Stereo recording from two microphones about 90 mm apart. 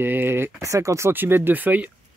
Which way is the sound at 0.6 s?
35° right (ahead or behind).